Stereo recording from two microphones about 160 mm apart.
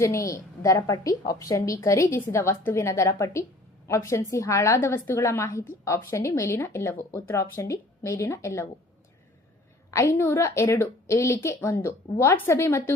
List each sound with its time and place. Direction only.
0.0 s a woman's voice: 20° left (ahead or behind)
9.9 s a woman's voice: 15° left (ahead or behind)